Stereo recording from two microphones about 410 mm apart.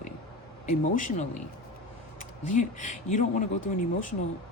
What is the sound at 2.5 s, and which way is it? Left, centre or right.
Speech, centre.